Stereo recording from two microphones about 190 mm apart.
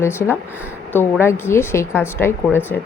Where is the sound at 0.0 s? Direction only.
15° left (ahead or behind).